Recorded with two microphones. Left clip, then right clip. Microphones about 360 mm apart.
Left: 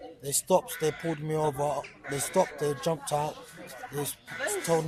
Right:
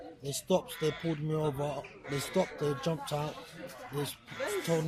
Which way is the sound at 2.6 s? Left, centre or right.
Left.